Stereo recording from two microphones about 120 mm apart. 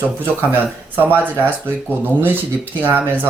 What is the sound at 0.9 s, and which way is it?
Speech, 15° right (ahead or behind).